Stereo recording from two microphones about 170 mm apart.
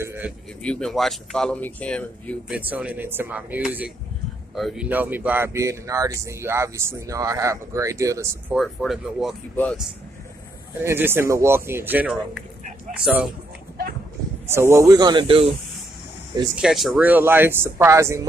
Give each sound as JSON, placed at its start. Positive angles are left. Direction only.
{"t": 0.0, "sound": "pigeon", "side_deg": -10}
{"t": 0.6, "sound": "speech", "side_deg": 5}
{"t": 2.5, "sound": "speech", "side_deg": -10}
{"t": 4.8, "sound": "speech", "side_deg": -10}
{"t": 8.5, "sound": "speech", "side_deg": 0}
{"t": 10.8, "sound": "speech", "side_deg": -15}
{"t": 14.5, "sound": "speech", "side_deg": -15}
{"t": 16.5, "sound": "speech", "side_deg": 0}